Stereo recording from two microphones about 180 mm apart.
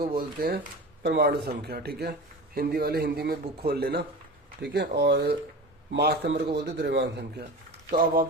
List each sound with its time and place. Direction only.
0.0 s a man's voice: 55° right (ahead or behind)
7.9 s speech: 50° right (ahead or behind)